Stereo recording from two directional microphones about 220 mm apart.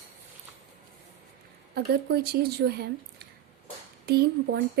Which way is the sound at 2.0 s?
45° right (ahead or behind).